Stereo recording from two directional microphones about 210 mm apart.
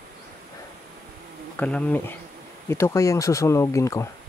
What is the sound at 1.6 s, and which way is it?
Speech, 5° left (ahead or behind).